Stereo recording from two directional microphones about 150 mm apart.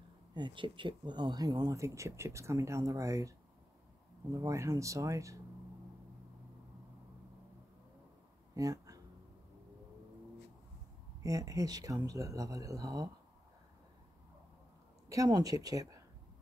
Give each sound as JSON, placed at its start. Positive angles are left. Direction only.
{"t": 0.3, "sound": "speech", "side_deg": -30}
{"t": 8.5, "sound": "a sound", "side_deg": -20}
{"t": 11.2, "sound": "speech", "side_deg": -20}
{"t": 15.0, "sound": "speech", "side_deg": -25}